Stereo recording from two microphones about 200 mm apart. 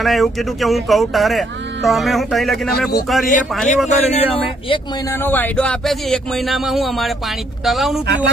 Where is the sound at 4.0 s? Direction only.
35° left (ahead or behind).